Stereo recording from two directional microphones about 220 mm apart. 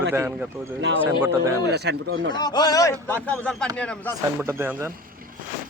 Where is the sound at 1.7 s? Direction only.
50° right (ahead or behind).